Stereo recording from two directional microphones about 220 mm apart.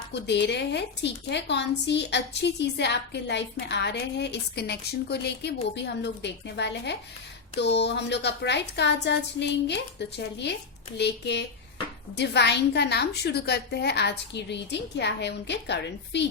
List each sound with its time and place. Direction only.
0.1 s a woman's voice: 50° left (ahead or behind)